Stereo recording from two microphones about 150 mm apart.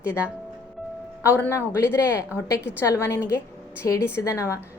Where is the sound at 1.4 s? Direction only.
15° left (ahead or behind).